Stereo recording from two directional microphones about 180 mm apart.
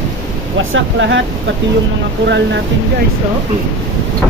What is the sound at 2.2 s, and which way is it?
Speech, 75° right (ahead or behind).